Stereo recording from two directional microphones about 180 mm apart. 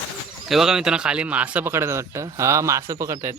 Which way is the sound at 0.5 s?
5° right (ahead or behind).